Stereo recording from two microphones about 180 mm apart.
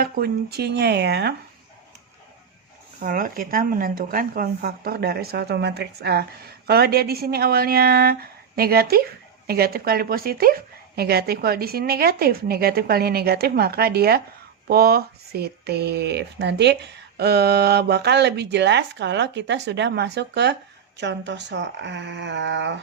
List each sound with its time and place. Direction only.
0.0 s speech: 60° right (ahead or behind)
3.0 s speech: 50° right (ahead or behind); by 22.8 s 80° right